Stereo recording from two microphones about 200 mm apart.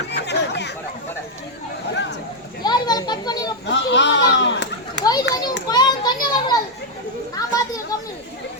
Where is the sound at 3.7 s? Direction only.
60° left (ahead or behind).